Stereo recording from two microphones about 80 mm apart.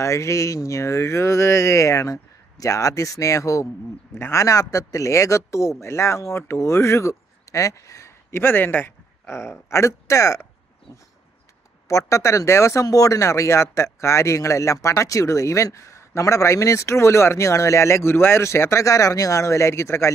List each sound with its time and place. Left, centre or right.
0.0 s speech: left
9.3 s speech: left
12.1 s speech: left